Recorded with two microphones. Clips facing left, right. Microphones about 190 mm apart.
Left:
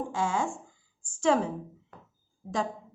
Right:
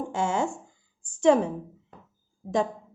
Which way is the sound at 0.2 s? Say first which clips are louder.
Right 3 dB; 25° right (ahead or behind).